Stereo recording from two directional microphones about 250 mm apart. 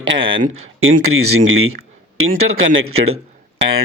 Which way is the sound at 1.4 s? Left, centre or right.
Right.